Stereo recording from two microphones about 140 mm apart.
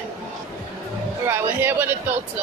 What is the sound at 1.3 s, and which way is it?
Speech, 15° right (ahead or behind).